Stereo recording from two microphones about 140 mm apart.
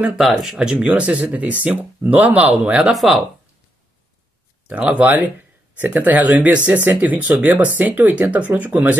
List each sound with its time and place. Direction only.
0.0 s speech: 5° right (ahead or behind)
4.6 s speech: 10° right (ahead or behind)